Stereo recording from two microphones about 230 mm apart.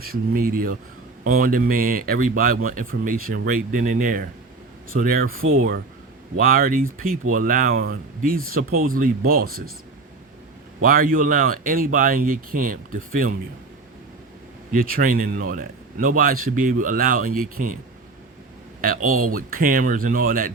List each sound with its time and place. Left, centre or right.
0.0 s a man's voice: right
10.8 s a man's voice: right
14.7 s a man's voice: right
18.8 s a man's voice: right